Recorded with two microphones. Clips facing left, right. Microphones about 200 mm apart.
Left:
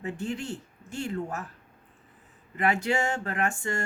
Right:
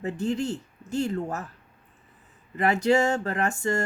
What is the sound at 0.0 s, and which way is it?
Speech, 40° right (ahead or behind).